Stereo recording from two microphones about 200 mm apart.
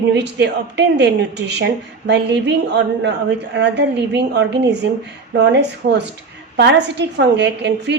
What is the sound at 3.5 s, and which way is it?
A woman's voice, 60° right (ahead or behind).